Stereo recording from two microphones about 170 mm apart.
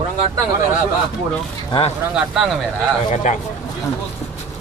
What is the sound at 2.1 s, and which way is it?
Speech, 5° right (ahead or behind).